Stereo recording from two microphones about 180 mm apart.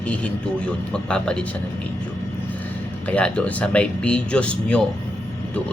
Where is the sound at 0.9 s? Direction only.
5° left (ahead or behind).